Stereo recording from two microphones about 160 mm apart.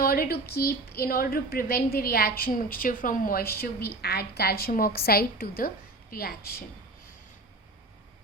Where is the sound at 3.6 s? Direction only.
80° left.